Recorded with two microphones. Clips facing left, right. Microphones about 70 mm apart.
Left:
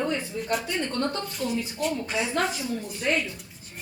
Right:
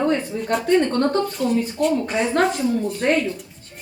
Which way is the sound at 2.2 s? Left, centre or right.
Right.